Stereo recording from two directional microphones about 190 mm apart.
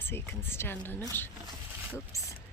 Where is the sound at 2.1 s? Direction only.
15° left (ahead or behind).